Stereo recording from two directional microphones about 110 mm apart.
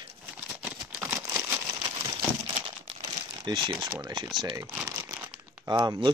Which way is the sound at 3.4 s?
45° right (ahead or behind).